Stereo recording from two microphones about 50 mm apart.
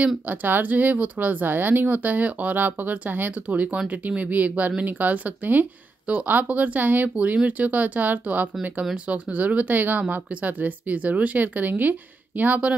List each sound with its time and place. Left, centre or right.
0.3 s speech: right